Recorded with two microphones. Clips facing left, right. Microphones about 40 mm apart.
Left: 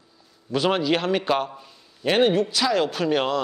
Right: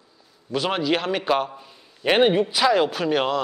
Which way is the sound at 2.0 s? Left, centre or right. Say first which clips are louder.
Right 1 dB; centre.